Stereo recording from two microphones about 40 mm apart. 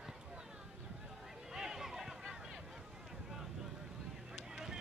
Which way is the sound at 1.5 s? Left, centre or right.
Centre.